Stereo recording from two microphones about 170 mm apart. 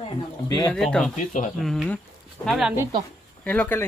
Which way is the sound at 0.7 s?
5° left (ahead or behind).